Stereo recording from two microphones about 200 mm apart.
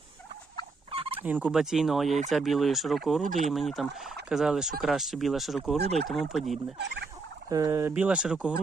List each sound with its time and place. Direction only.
0.9 s fowl: 30° right (ahead or behind)
1.2 s speech: 5° right (ahead or behind)
6.8 s turkey: 60° right (ahead or behind)
7.5 s speech: 15° right (ahead or behind)